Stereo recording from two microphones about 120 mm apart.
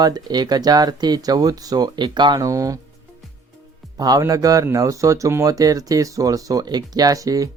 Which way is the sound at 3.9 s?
30° right (ahead or behind).